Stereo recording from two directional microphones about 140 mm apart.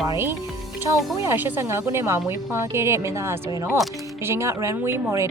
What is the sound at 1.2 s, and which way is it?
Speech, 15° right (ahead or behind).